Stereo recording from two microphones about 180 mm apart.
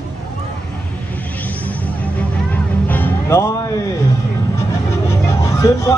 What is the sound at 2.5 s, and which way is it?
Music, 10° left (ahead or behind).